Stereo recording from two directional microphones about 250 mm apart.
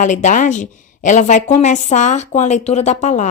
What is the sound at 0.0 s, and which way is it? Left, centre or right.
A woman's voice, left.